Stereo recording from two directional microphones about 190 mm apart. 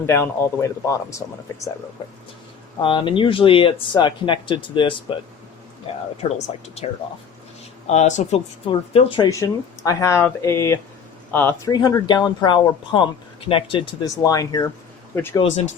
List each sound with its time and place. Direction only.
0.0 s speech: 15° left (ahead or behind)
2.8 s speech: 25° left (ahead or behind)
7.9 s speech: 35° left (ahead or behind); by 11.7 s 10° left (ahead or behind)
11.7 s speech: 20° left (ahead or behind)